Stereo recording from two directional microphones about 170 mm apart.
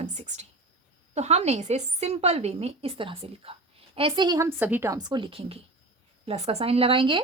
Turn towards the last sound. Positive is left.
turn(degrees=-30)  # may be behind; listen again after turning